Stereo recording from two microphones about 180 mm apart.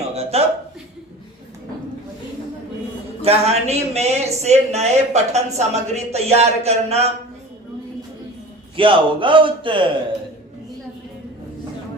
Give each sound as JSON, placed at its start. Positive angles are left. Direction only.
{"t": 0.1, "sound": "a sound", "side_deg": -35}
{"t": 3.2, "sound": "speech", "side_deg": -35}
{"t": 8.7, "sound": "a man's voice", "side_deg": -30}